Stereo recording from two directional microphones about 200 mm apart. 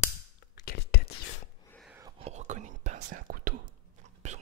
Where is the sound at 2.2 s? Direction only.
35° right (ahead or behind).